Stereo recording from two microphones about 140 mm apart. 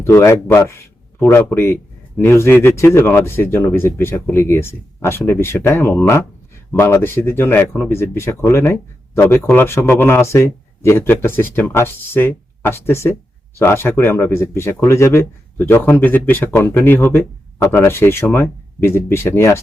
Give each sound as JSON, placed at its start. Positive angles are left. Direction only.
{"t": 0.0, "sound": "speech", "side_deg": 20}